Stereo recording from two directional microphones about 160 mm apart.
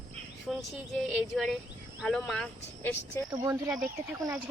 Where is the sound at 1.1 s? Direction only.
Centre (ahead or behind).